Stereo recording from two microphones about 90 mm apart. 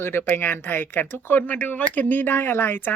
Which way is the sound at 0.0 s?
25° left (ahead or behind).